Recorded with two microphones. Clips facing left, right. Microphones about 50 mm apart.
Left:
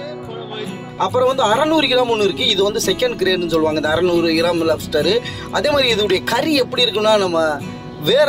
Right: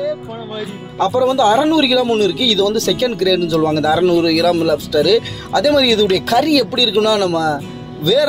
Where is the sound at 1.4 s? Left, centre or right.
Centre.